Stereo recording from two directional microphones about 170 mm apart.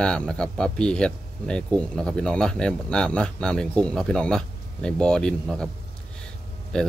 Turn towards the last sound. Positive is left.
turn(degrees=5)  # may be behind; listen again after turning